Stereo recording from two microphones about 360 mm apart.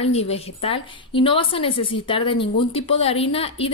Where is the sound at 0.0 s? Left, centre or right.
Centre.